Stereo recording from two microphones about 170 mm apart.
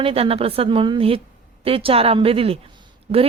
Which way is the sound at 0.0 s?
35° right (ahead or behind).